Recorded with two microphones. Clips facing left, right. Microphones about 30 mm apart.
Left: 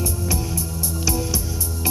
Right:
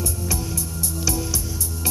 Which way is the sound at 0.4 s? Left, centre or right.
Centre.